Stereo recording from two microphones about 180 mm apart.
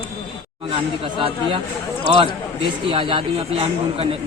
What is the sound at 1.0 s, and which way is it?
Speech, 25° right (ahead or behind).